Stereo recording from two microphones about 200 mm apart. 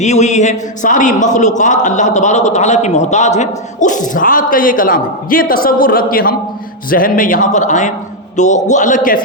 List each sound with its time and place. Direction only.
0.0 s a man's voice: 35° left (ahead or behind)